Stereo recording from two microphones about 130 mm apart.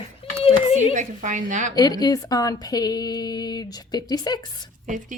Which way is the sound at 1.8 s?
30° left (ahead or behind).